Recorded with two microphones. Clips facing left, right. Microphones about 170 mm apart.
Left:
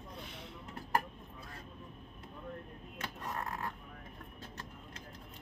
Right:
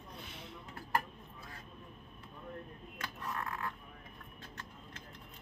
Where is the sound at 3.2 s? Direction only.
35° left (ahead or behind).